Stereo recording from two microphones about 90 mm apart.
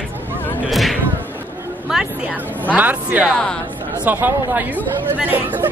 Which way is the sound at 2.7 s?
20° right (ahead or behind).